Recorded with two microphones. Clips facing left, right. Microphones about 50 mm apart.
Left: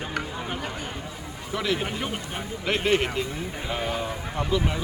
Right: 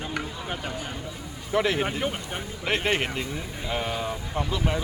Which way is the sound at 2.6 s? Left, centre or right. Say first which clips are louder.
Left 2 dB; centre.